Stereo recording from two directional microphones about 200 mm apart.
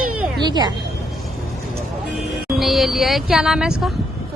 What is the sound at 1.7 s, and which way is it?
Vehicle, 5° right (ahead or behind).